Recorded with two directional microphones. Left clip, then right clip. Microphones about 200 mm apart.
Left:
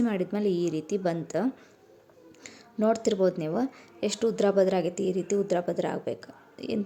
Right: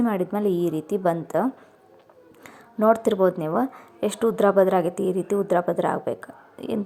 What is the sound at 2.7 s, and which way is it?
A woman's voice, 5° left (ahead or behind).